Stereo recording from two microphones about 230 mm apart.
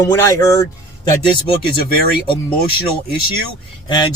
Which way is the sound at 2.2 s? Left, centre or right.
Left.